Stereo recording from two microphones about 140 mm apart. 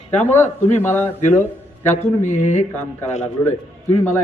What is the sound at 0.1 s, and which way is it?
A man's voice, 15° left (ahead or behind).